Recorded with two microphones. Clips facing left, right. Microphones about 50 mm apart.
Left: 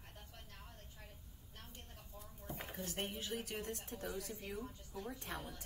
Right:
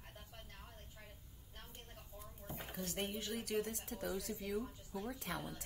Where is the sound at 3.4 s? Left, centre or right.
Right.